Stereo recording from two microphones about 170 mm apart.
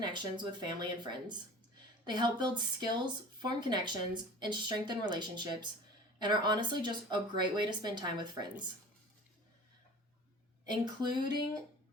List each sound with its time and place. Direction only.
0.0 s speech: 25° right (ahead or behind)
10.7 s speech: 25° right (ahead or behind)